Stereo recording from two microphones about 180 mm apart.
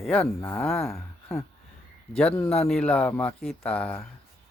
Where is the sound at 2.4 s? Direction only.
35° left (ahead or behind).